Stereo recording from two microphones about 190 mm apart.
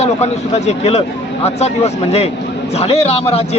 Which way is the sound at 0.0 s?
35° left (ahead or behind).